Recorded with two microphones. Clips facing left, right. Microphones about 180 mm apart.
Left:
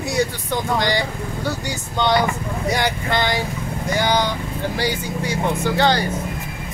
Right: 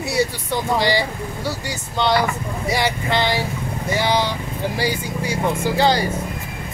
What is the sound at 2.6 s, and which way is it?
Speech, 5° right (ahead or behind).